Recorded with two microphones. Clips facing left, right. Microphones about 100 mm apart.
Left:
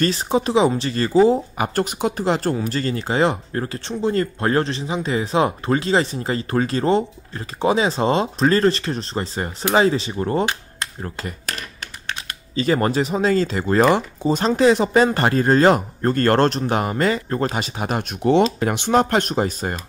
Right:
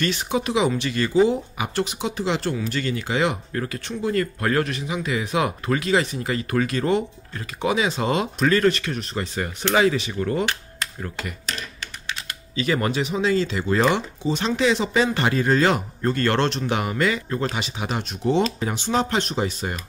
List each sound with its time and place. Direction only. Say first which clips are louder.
0.0 s speech: left 4 dB; 35° left (ahead or behind)